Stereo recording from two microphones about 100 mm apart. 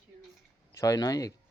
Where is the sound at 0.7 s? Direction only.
35° left (ahead or behind).